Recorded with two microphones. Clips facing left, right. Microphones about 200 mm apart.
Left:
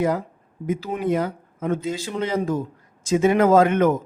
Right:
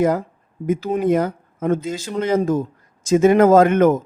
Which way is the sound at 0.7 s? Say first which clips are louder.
Right 5 dB; 45° right (ahead or behind).